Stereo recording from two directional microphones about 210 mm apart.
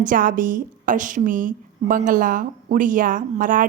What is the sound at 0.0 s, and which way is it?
A woman's voice, 40° right (ahead or behind).